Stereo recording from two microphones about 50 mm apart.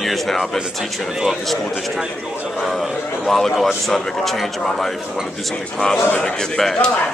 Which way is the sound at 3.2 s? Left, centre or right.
Centre.